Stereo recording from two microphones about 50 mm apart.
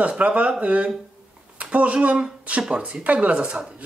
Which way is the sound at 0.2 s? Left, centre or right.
Right.